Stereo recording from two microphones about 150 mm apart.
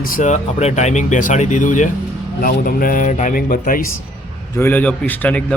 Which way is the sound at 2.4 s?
70° left (ahead or behind).